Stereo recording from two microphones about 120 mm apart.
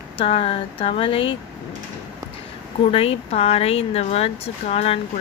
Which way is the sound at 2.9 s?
55° left (ahead or behind).